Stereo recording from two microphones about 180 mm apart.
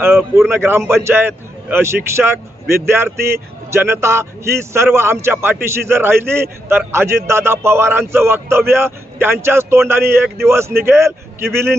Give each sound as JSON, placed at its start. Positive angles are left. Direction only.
{"t": 0.0, "sound": "a man's voice", "side_deg": -10}